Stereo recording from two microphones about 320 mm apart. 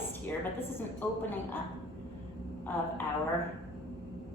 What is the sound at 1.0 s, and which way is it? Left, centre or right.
Speech, centre.